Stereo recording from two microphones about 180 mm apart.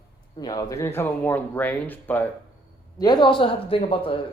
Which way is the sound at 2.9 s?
25° left (ahead or behind).